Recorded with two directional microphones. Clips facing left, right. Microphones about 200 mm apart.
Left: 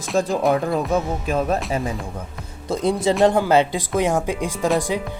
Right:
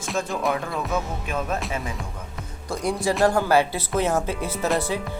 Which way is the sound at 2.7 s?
20° left (ahead or behind).